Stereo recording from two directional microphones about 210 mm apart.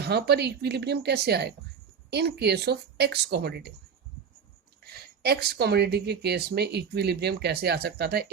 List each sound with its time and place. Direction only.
0.0 s speech: 50° right (ahead or behind)
4.8 s speech: 50° right (ahead or behind)